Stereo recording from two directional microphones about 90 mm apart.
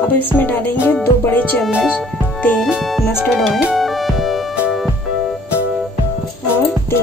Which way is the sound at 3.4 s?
Centre (ahead or behind).